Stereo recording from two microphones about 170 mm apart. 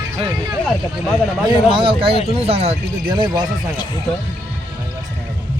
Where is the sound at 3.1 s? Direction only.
25° right (ahead or behind).